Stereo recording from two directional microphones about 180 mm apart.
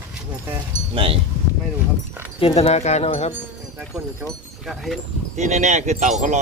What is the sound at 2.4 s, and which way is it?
Speech, 35° left (ahead or behind).